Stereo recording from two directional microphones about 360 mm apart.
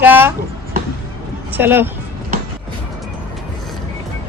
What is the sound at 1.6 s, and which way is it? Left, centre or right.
Speech, centre.